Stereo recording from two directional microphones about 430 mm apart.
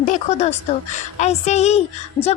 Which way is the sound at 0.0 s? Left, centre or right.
Centre.